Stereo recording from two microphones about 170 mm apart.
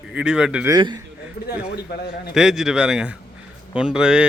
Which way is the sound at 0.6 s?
25° right (ahead or behind).